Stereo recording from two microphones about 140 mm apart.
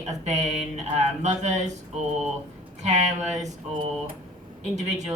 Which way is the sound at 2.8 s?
55° right (ahead or behind).